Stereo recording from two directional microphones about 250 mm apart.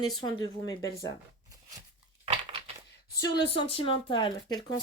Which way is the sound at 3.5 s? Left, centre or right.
Left.